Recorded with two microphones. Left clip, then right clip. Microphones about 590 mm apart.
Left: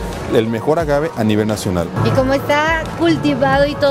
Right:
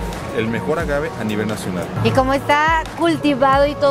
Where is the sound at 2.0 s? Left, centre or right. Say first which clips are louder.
Even; right.